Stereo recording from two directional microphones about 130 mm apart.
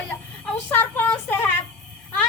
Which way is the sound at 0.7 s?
15° left (ahead or behind).